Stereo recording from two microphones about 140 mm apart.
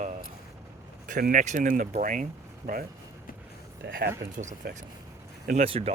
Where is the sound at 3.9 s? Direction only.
90° right.